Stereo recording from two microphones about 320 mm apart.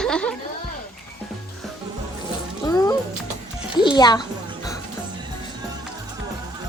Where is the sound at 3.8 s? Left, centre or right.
Centre.